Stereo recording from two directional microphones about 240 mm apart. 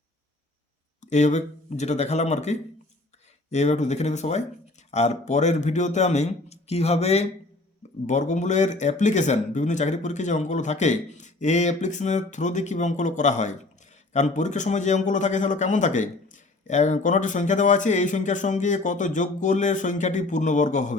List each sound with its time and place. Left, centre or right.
1.1 s speech: left